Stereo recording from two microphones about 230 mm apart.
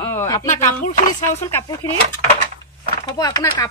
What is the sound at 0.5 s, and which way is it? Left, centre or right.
Speech, left.